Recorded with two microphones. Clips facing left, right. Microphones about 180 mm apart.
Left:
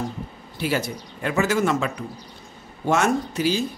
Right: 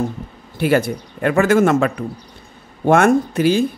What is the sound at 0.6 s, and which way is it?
Speech, 55° right (ahead or behind).